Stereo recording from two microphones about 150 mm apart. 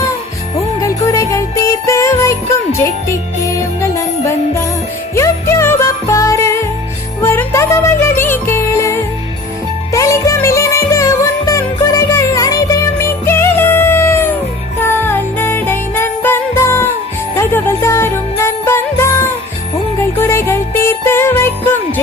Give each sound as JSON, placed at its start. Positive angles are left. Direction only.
{"t": 0.8, "sound": "music", "side_deg": 20}